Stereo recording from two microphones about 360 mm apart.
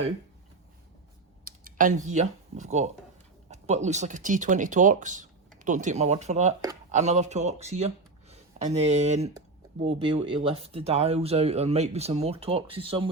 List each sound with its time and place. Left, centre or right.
1.5 s speech: right